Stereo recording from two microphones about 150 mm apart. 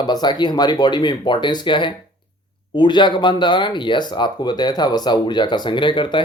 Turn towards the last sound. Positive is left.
turn(degrees=30)  # may be behind; listen again after turning